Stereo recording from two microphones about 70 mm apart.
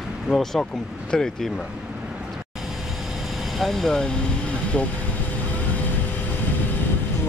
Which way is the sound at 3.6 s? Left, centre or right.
Centre.